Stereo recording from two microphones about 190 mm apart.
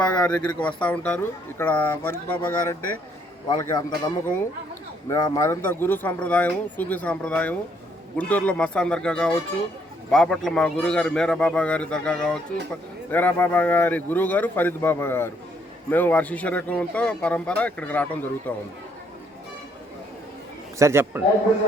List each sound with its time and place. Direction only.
0.0 s a man's voice: 5° left (ahead or behind)
20.7 s a man's voice: 15° right (ahead or behind)